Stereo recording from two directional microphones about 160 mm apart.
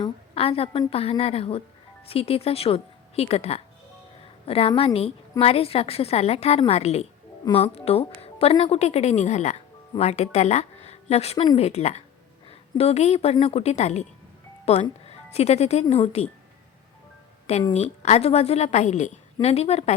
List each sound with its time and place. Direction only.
0.0 s a woman's voice: 35° left (ahead or behind)
17.6 s a woman's voice: 35° left (ahead or behind)